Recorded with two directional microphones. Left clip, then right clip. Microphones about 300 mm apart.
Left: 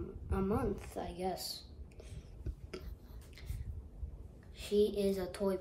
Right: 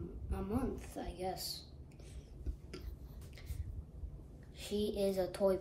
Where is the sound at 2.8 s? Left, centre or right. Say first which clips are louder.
Left 4 dB; centre.